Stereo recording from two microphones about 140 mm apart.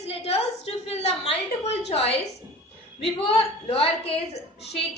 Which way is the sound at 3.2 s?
45° left (ahead or behind).